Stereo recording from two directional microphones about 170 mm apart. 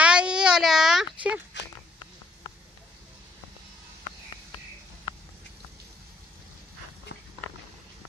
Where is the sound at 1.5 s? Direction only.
90° left.